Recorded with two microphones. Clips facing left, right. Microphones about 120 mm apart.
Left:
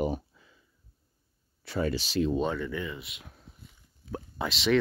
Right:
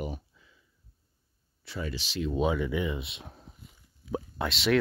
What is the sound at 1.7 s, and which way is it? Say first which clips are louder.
Speech: left 7 dB; 45° left (ahead or behind).